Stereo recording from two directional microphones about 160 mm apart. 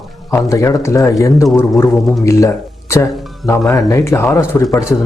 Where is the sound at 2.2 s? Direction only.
20° left (ahead or behind).